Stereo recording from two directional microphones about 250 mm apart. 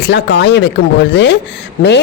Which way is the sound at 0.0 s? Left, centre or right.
Left.